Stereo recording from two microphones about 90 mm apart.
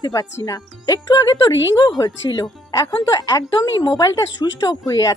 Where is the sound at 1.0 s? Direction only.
50° left (ahead or behind).